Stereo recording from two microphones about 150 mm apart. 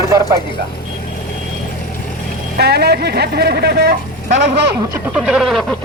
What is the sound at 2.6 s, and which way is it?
Speech, 90° right.